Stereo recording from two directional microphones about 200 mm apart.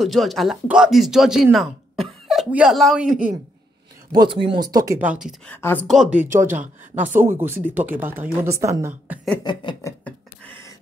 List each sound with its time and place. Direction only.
0.0 s speech: centre (ahead or behind)
4.1 s speech: 20° right (ahead or behind); by 5.3 s 5° right (ahead or behind)
5.5 s speech: 10° left (ahead or behind); by 9.2 s 10° right (ahead or behind)
9.4 s a sound: 25° left (ahead or behind)